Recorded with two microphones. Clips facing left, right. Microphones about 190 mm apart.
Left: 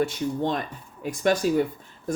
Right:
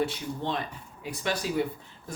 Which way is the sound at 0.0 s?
45° left (ahead or behind).